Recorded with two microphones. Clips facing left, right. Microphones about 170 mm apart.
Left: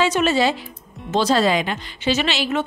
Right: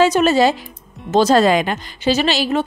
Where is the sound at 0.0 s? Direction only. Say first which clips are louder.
Right 5 dB; 40° right (ahead or behind).